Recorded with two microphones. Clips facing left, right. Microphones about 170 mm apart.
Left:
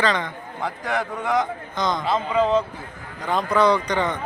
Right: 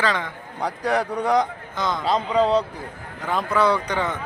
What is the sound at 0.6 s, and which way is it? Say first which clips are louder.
A man's voice: right 3 dB; 35° right (ahead or behind).